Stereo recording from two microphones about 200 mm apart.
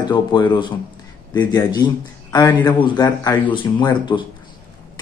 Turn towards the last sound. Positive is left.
turn(degrees=20)  # may be behind; listen again after turning